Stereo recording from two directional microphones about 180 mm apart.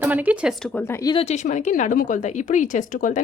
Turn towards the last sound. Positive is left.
turn(degrees=45)  # may be behind; listen again after turning